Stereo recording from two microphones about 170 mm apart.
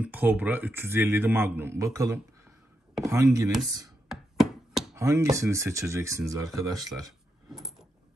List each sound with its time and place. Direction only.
0.0 s a man's voice: 10° right (ahead or behind)
4.1 s chopping: centre (ahead or behind)
4.9 s a man's voice: 15° right (ahead or behind)